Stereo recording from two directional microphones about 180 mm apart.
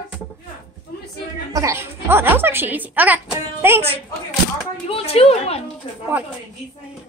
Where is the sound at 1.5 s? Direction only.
15° right (ahead or behind).